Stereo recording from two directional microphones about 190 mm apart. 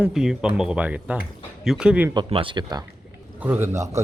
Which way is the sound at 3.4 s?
10° right (ahead or behind).